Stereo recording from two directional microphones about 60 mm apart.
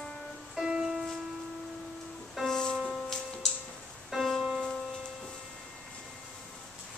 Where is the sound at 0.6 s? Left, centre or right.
Centre.